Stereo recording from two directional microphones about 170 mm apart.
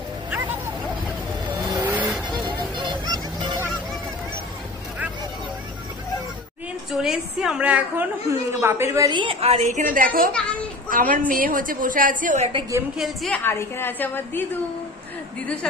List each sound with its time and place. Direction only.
0.3 s a sound: 10° right (ahead or behind)
1.6 s vehicle: 25° right (ahead or behind)
2.0 s vehicle: 5° right (ahead or behind)
2.4 s music: 25° right (ahead or behind)
6.9 s a woman's voice: 5° right (ahead or behind); by 12.4 s 50° right (ahead or behind)
12.9 s a woman's voice: centre (ahead or behind)
13.4 s a woman's voice: 15° left (ahead or behind)
15.4 s a woman's voice: 5° left (ahead or behind)